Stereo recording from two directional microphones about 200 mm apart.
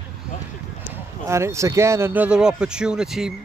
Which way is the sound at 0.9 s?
15° right (ahead or behind).